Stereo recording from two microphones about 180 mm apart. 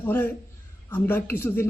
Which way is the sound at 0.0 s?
10° left (ahead or behind).